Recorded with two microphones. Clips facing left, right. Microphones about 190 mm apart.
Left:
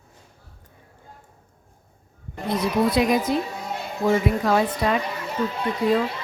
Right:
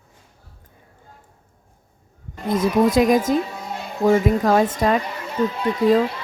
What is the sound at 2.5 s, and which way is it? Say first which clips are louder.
Speech: right 4 dB; 45° right (ahead or behind).